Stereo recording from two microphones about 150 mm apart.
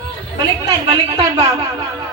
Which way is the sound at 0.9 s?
30° right (ahead or behind).